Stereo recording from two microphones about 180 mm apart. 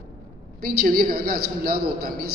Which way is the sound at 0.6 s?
55° right (ahead or behind).